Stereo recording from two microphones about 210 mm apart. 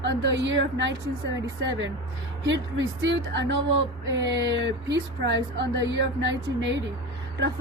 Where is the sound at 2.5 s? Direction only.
60° right (ahead or behind).